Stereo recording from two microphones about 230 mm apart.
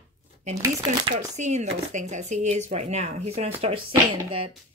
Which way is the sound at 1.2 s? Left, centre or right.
Right.